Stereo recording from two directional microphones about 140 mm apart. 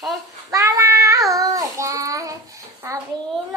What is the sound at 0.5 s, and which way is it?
Child singing, 25° right (ahead or behind).